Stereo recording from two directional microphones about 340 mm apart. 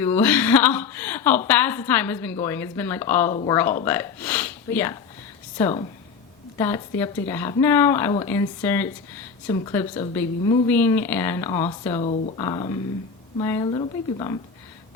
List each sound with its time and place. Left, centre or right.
0.0 s a woman's voice: centre